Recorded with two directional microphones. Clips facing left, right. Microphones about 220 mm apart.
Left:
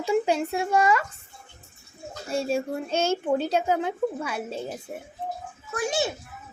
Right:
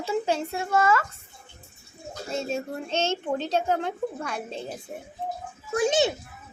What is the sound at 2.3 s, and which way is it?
A woman's voice, 10° left (ahead or behind).